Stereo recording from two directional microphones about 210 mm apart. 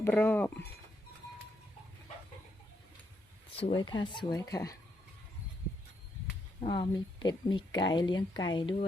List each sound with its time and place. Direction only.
0.0 s speech: 10° left (ahead or behind)
3.5 s speech: 25° left (ahead or behind)
6.6 s speech: 20° left (ahead or behind)